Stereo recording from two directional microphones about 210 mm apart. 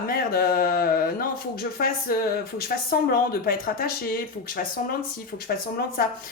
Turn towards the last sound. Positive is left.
turn(degrees=45)  # may be behind; listen again after turning